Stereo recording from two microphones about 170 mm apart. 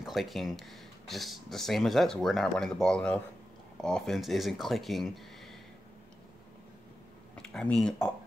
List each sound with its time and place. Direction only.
0.0 s speech: centre (ahead or behind)
7.4 s speech: 5° left (ahead or behind)